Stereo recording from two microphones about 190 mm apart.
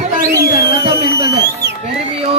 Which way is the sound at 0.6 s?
60° right (ahead or behind).